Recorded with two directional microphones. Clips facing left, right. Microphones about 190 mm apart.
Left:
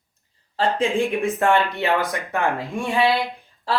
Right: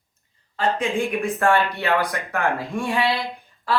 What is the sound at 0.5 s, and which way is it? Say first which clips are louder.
Speech: left 2 dB; 30° left (ahead or behind).